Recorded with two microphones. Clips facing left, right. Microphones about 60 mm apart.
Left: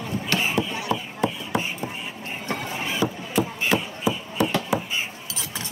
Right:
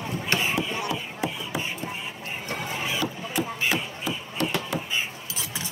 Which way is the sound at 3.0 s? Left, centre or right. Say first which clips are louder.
Left 4 dB; centre.